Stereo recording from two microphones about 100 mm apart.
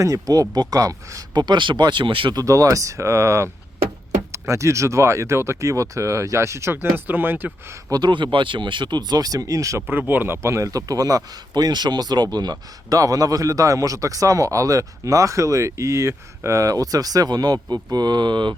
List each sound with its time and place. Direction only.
0.0 s speech: 35° right (ahead or behind); by 2.3 s 55° right (ahead or behind)
2.3 s speech: 35° right (ahead or behind)
7.9 s speech: 45° right (ahead or behind)
10.0 s speech: 20° right (ahead or behind); by 18.5 s 50° right (ahead or behind)